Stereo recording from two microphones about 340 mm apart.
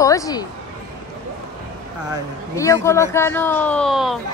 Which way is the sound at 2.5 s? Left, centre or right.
Centre.